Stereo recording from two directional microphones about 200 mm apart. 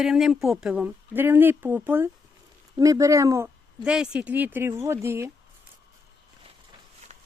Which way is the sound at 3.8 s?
5° right (ahead or behind).